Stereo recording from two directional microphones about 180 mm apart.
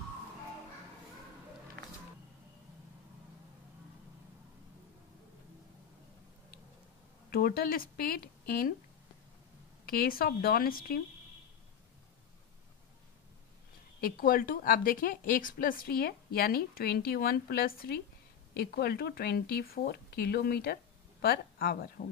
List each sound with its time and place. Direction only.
7.2 s speech: 55° left (ahead or behind)
9.8 s speech: 55° left (ahead or behind)
14.0 s a woman's voice: 55° left (ahead or behind)